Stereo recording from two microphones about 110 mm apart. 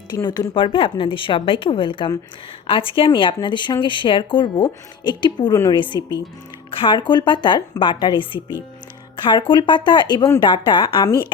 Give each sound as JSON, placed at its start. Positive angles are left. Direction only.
{"t": 0.1, "sound": "speech", "side_deg": 40}